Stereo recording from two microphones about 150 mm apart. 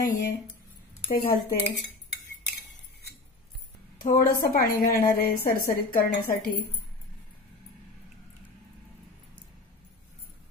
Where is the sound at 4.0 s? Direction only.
70° left (ahead or behind).